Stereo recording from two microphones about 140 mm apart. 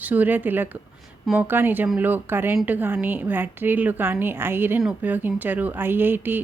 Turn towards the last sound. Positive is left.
turn(degrees=-15)  # may be behind; listen again after turning